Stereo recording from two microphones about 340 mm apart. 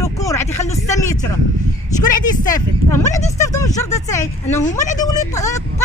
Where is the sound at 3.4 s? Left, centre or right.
Centre.